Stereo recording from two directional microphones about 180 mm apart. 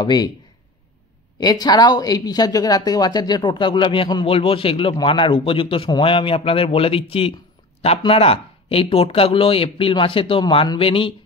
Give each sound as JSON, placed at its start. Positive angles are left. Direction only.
{"t": 0.0, "sound": "speech", "side_deg": 25}
{"t": 1.4, "sound": "speech", "side_deg": 20}